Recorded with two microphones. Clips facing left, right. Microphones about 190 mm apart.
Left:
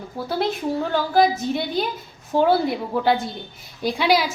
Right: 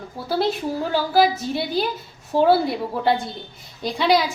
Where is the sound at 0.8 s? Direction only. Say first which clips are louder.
Even; 5° right (ahead or behind).